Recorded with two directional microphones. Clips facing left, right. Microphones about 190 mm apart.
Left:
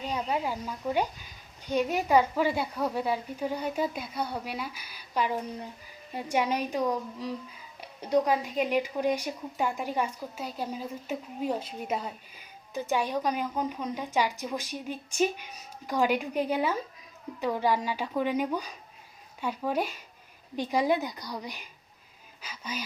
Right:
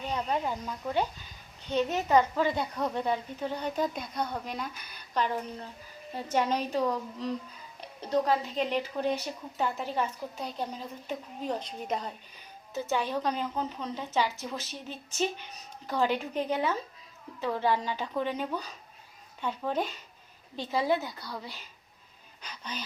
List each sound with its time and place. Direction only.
0.0 s a woman's voice: 10° left (ahead or behind)